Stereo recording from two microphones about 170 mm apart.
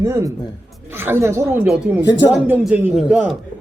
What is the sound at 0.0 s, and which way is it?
A man's voice, 20° right (ahead or behind).